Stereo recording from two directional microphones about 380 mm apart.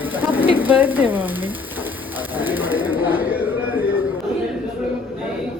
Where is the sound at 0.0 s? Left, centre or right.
Centre.